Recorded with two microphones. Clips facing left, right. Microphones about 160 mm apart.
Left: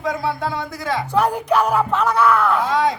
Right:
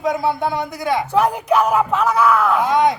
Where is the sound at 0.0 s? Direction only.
20° right (ahead or behind).